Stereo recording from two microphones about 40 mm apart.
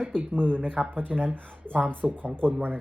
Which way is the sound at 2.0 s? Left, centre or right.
Centre.